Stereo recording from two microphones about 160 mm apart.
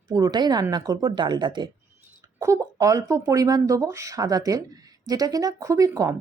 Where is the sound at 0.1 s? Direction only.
25° right (ahead or behind).